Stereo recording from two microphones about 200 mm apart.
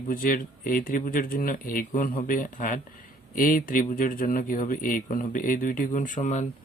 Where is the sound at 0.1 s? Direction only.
45° left (ahead or behind).